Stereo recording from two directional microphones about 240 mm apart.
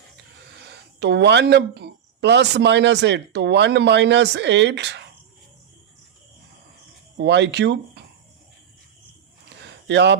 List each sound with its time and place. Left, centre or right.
0.7 s speech: right
7.2 s speech: right
9.8 s speech: right